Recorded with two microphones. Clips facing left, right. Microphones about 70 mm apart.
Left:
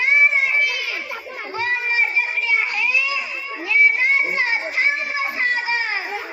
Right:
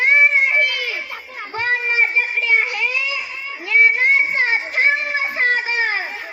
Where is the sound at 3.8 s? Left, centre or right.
Right.